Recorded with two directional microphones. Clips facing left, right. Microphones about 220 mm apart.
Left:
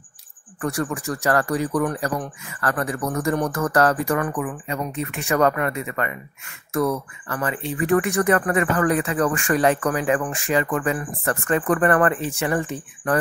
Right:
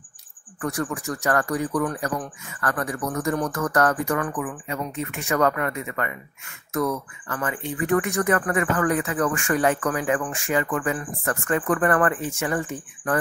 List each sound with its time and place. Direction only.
0.6 s speech: 30° left (ahead or behind)
10.0 s speech: 20° left (ahead or behind)
10.5 s speech: 30° left (ahead or behind)